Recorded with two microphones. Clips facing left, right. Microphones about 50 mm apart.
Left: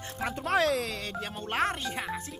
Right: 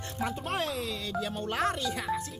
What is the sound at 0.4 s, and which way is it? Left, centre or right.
Speech, left.